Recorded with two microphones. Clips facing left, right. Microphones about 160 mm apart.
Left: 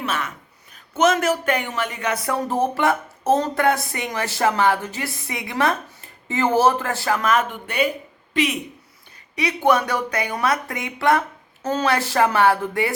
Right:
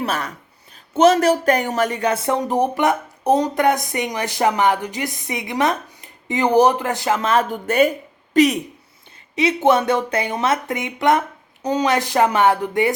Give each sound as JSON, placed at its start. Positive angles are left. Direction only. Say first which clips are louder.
{"t": 0.0, "sound": "speech", "louder": "right 3 dB", "side_deg": -35}
{"t": 9.3, "sound": "speech", "louder": "right 3 dB", "side_deg": -25}